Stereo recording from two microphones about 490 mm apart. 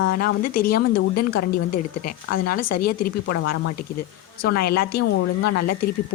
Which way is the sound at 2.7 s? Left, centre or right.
Left.